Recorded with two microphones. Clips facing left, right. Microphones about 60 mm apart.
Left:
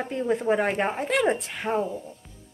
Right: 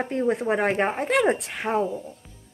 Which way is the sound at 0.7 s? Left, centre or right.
Right.